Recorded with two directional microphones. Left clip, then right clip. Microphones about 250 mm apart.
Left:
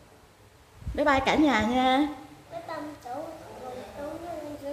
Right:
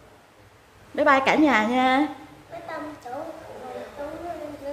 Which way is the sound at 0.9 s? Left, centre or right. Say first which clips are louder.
Right 5 dB; centre.